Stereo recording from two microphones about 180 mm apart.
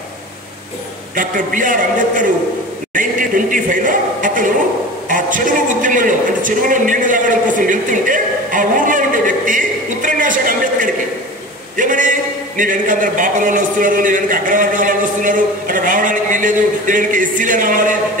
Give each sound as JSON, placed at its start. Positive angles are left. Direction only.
{"t": 1.1, "sound": "a man's voice", "side_deg": -45}